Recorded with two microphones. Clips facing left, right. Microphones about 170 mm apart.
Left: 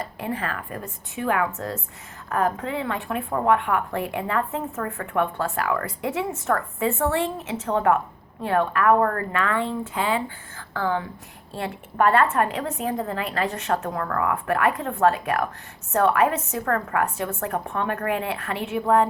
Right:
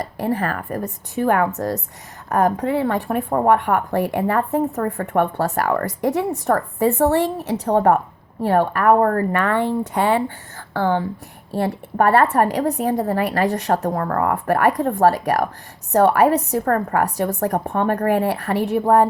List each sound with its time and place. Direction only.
0.0 s a woman's voice: 40° right (ahead or behind)
9.4 s speech: 60° right (ahead or behind)
9.9 s a woman's voice: 45° right (ahead or behind)
10.8 s a woman's voice: 30° right (ahead or behind)